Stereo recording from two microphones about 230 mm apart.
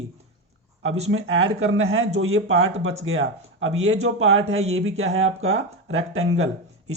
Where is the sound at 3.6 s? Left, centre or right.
Right.